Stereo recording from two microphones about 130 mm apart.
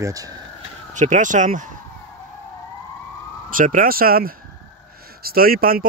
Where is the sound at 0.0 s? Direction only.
25° right (ahead or behind).